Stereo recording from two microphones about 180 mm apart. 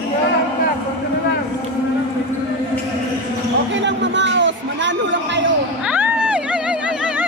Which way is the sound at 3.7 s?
80° right.